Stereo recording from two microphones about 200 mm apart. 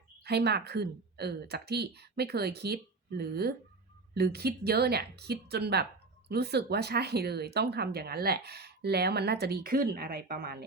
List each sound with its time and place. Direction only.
0.3 s speech: 55° right (ahead or behind)